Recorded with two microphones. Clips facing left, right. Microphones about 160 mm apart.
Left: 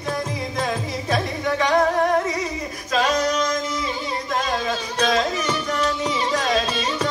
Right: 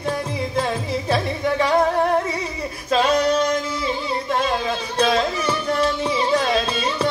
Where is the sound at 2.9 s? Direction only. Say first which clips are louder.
Right 3 dB; 30° right (ahead or behind).